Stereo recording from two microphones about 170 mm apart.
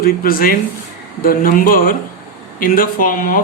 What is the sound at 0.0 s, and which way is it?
Speech, 55° left (ahead or behind).